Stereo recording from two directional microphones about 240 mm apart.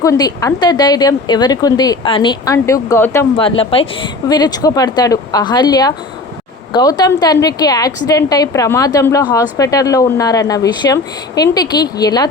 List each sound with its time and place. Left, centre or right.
0.0 s a woman's voice: centre
3.3 s a woman's voice: left